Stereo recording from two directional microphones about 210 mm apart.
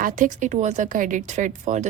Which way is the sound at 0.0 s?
40° right (ahead or behind).